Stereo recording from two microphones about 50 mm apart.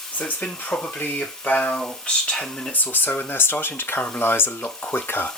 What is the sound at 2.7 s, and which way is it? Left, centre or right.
Speech, left.